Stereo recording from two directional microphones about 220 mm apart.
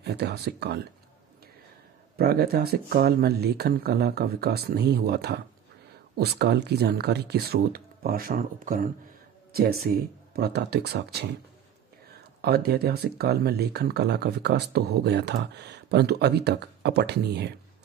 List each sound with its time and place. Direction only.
0.0 s speech: 50° right (ahead or behind)
2.1 s speech: 45° right (ahead or behind)